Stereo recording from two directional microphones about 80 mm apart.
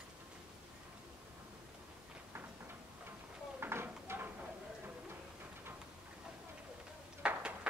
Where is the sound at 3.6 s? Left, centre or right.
Right.